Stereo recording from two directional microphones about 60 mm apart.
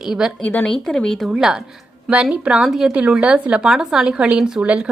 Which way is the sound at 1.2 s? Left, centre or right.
Centre.